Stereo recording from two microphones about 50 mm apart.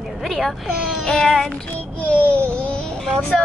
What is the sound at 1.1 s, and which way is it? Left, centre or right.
Speech, centre.